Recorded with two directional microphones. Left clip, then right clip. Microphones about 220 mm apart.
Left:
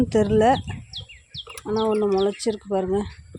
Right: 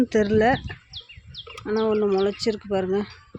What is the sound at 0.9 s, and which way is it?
Bird, 55° left (ahead or behind).